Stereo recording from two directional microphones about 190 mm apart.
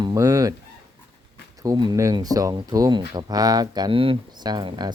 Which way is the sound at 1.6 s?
20° right (ahead or behind).